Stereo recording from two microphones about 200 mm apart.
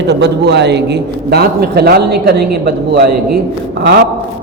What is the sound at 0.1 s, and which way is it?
A woman's voice, 55° right (ahead or behind).